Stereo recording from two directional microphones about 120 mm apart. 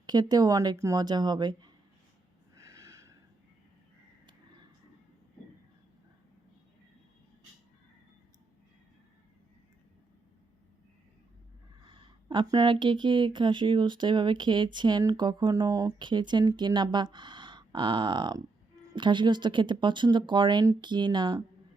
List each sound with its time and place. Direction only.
0.0 s speech: 35° right (ahead or behind)
2.6 s snort: 25° right (ahead or behind)
11.8 s speech: 40° right (ahead or behind)